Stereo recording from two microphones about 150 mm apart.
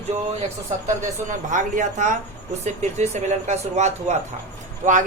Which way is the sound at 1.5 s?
55° right (ahead or behind).